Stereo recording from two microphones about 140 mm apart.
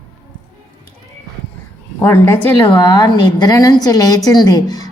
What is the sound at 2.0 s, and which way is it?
Speech, 15° left (ahead or behind).